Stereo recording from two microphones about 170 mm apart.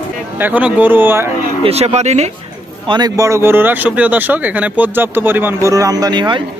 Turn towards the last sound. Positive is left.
turn(degrees=-25)  # may be behind; listen again after turning